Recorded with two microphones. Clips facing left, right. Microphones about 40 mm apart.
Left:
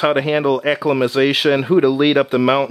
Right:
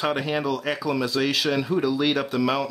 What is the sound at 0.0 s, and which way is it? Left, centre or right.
Speech, left.